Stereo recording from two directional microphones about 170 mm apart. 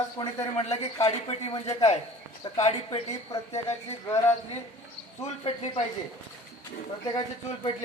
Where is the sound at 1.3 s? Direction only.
35° left (ahead or behind).